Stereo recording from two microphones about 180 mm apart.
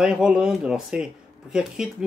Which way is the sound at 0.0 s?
5° right (ahead or behind).